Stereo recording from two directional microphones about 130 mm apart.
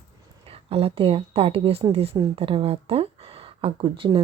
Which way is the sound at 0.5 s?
50° right (ahead or behind).